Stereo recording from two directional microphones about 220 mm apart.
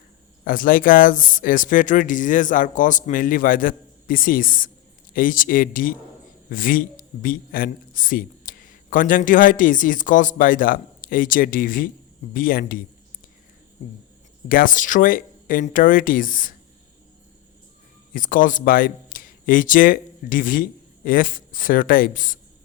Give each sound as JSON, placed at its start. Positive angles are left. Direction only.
{"t": 0.4, "sound": "a man's voice", "side_deg": 40}
{"t": 14.4, "sound": "a man's voice", "side_deg": 40}
{"t": 18.1, "sound": "a man's voice", "side_deg": 40}